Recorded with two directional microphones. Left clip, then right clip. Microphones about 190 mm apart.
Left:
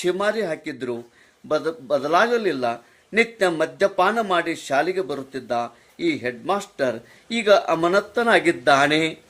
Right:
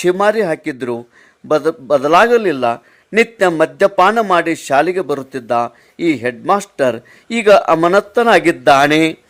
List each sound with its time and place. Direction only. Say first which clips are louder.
0.0 s a man's voice: right 9 dB; 45° right (ahead or behind)